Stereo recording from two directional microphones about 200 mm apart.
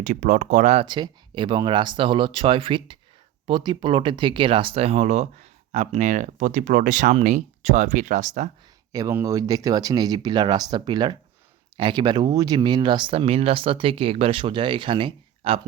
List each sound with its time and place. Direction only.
0.0 s speech: 40° right (ahead or behind)
8.9 s speech: 15° right (ahead or behind)